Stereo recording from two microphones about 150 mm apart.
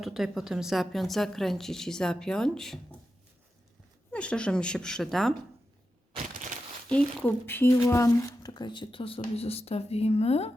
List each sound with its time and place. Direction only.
0.0 s a woman's voice: centre (ahead or behind)
4.1 s a woman's voice: 5° left (ahead or behind)
6.8 s speech: 5° left (ahead or behind); by 10.5 s 45° left (ahead or behind)